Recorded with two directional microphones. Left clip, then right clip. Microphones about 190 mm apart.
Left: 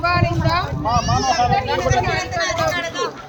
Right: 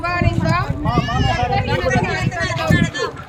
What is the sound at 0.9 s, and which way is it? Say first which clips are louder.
Speech: left 3 dB; 10° left (ahead or behind).